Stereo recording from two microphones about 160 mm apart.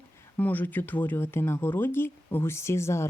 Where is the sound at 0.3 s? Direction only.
10° left (ahead or behind).